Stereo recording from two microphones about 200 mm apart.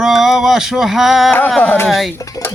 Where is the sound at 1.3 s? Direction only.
10° left (ahead or behind).